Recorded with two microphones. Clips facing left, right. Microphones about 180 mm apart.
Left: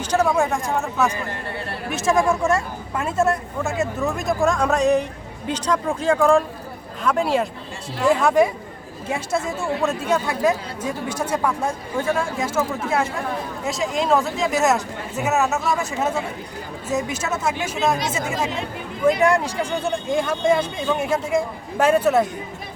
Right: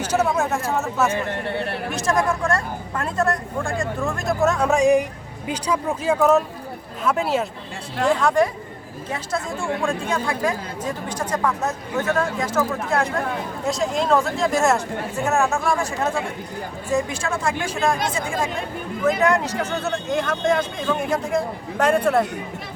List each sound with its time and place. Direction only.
0.0 s speech: 5° right (ahead or behind)
1.5 s speech: 65° right (ahead or behind)
2.4 s speech: 10° left (ahead or behind)
19.2 s speech: 10° left (ahead or behind)